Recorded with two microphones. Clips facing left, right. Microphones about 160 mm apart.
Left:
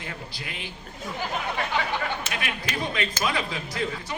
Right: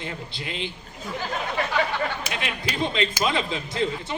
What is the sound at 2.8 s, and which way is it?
A man's voice, 25° right (ahead or behind).